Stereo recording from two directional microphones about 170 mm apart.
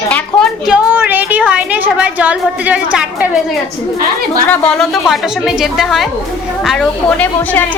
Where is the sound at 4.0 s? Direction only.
55° right (ahead or behind).